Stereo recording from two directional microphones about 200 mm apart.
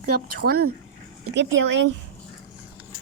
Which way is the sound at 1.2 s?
65° right (ahead or behind).